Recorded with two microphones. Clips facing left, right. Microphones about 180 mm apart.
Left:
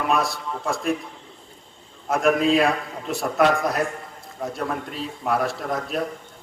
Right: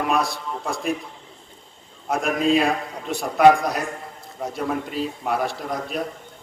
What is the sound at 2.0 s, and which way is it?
A man's voice, centre (ahead or behind).